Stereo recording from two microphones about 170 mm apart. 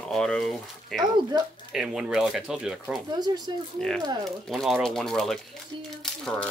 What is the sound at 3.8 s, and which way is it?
Speech, 5° left (ahead or behind).